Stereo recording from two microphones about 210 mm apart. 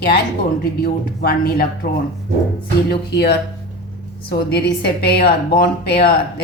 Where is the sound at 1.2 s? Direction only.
45° left (ahead or behind).